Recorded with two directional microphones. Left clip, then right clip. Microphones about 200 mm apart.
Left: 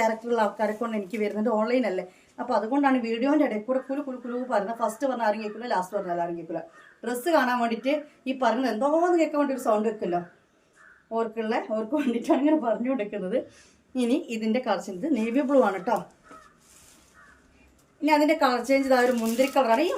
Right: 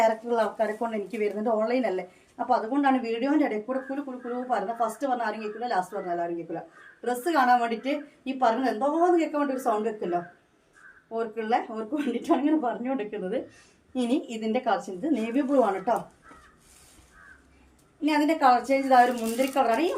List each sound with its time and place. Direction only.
0.0 s a woman's voice: 25° left (ahead or behind)
18.0 s a woman's voice: 20° left (ahead or behind)